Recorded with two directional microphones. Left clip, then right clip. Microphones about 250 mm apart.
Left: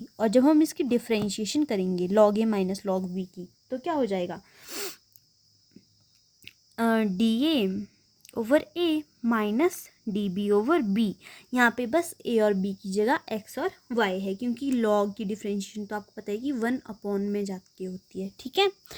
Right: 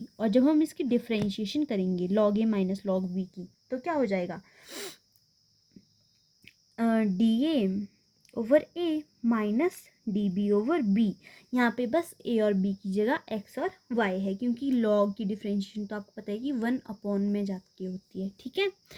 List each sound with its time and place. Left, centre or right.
0.2 s speech: left
6.4 s speech: left